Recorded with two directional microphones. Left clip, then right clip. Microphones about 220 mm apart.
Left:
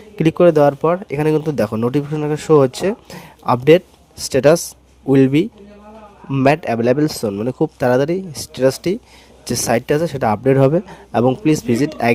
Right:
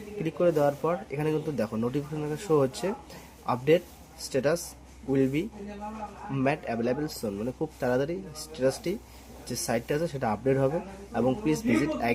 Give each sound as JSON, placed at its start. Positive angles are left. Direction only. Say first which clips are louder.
{"t": 0.2, "sound": "speech", "louder": "left 13 dB", "side_deg": 50}